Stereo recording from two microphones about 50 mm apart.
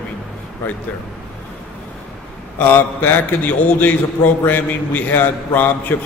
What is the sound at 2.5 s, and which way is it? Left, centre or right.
A man's voice, left.